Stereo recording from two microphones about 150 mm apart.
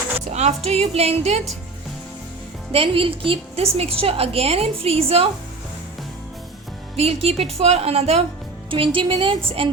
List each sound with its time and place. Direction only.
0.3 s a woman's voice: 45° right (ahead or behind)
2.7 s a woman's voice: 35° right (ahead or behind)
6.9 s a woman's voice: 45° right (ahead or behind)